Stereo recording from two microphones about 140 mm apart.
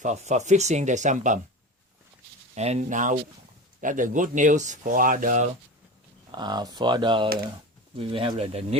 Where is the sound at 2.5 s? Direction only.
50° right (ahead or behind); by 5.4 s 70° right (ahead or behind).